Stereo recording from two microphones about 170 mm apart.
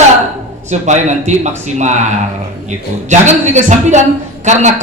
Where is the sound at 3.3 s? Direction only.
45° right (ahead or behind).